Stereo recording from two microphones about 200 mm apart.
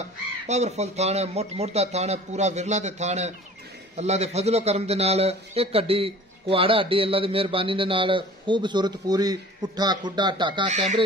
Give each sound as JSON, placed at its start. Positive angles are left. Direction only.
{"t": 0.5, "sound": "a man's voice", "side_deg": -35}
{"t": 10.7, "sound": "a man's voice", "side_deg": -35}